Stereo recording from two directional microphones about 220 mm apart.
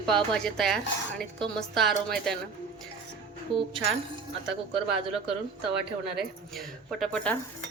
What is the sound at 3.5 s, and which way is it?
Speech, 25° right (ahead or behind).